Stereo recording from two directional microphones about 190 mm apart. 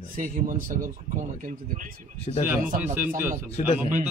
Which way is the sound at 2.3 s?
35° left (ahead or behind).